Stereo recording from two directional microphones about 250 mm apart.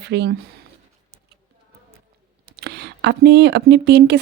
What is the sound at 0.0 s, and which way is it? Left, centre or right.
Speech, right.